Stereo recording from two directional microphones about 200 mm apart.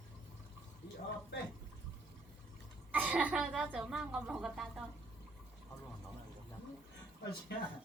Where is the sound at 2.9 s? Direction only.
10° right (ahead or behind).